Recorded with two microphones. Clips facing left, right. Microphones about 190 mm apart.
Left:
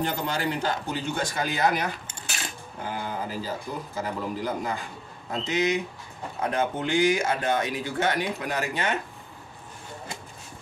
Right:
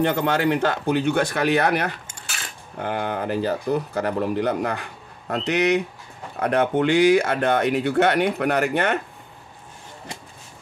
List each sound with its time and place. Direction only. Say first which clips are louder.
0.0 s speech: right 7 dB; 65° right (ahead or behind)